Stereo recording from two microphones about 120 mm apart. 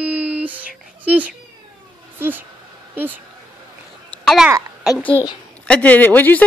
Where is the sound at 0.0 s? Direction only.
10° right (ahead or behind).